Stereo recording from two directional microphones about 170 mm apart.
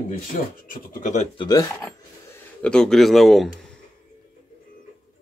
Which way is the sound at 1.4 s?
20° left (ahead or behind).